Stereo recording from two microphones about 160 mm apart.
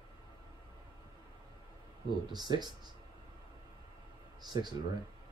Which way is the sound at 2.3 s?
25° right (ahead or behind).